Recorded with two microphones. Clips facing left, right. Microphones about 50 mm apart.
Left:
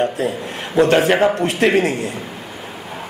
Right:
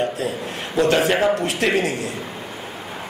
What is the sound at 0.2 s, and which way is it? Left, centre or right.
Speech, left.